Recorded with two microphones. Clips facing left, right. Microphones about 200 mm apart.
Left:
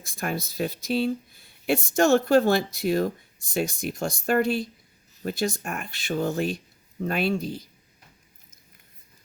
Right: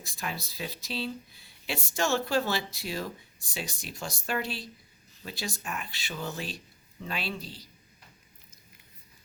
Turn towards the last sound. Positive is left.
turn(degrees=50)  # may be behind; listen again after turning